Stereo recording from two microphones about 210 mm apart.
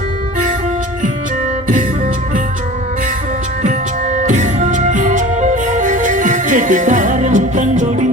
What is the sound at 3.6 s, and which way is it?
Music, 35° right (ahead or behind).